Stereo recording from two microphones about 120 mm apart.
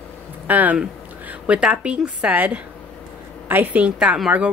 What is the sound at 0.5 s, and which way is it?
A woman's voice, 15° right (ahead or behind).